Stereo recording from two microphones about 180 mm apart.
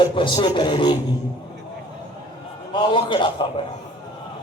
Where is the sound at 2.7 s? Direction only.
25° left (ahead or behind).